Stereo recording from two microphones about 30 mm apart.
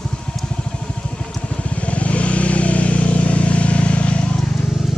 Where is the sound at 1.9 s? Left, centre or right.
Left.